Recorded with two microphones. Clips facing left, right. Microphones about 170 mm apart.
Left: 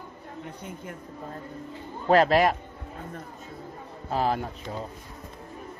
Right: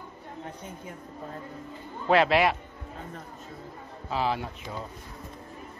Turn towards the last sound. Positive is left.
turn(degrees=45)  # may be behind; listen again after turning